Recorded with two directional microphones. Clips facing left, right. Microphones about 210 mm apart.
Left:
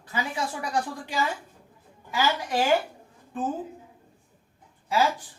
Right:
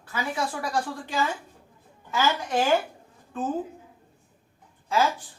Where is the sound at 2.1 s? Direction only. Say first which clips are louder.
Right 1 dB; 10° left (ahead or behind).